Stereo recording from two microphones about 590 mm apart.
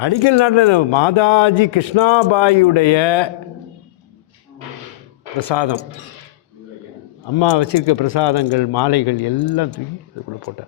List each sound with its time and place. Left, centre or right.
0.0 s speech: left
5.5 s speech: left
7.3 s speech: left